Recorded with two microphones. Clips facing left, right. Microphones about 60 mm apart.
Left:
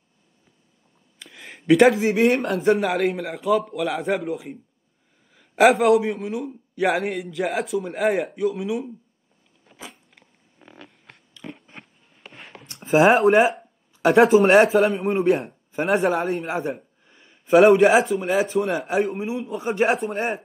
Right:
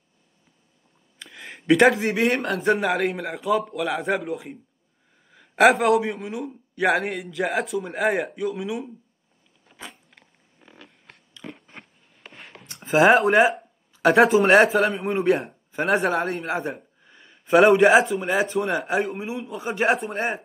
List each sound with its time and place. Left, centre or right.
1.2 s a sound: centre
2.0 s speech: right
2.7 s speech: centre
9.7 s biting: centre
11.4 s biting: centre
11.8 s a sound: centre
12.8 s speech: centre